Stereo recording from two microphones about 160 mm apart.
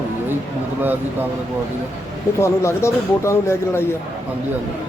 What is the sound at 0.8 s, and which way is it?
Speech, 10° right (ahead or behind).